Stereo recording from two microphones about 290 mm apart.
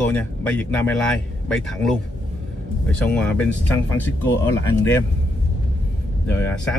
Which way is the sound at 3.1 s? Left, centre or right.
Centre.